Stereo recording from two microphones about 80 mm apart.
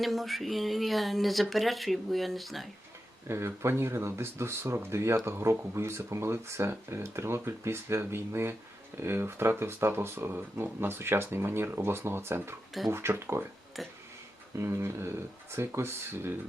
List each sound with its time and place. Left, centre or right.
0.0 s speech: centre
3.2 s speech: right
13.7 s speech: centre
14.6 s speech: right